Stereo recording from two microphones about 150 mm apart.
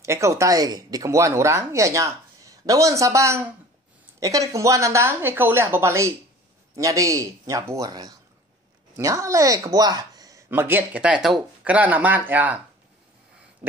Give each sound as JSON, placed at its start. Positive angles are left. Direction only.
{"t": 0.0, "sound": "speech", "side_deg": -20}